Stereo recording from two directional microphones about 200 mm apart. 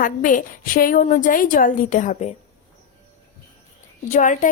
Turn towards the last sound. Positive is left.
turn(degrees=40)  # may be behind; listen again after turning